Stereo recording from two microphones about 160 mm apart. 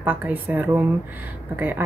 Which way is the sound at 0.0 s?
10° right (ahead or behind).